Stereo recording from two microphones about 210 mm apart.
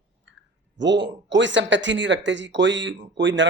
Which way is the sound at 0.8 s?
60° right (ahead or behind).